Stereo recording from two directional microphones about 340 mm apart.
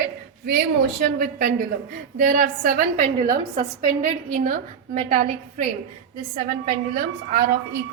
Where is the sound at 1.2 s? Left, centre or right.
Right.